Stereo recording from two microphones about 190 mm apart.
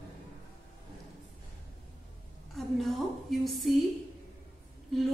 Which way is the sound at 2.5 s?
Centre (ahead or behind).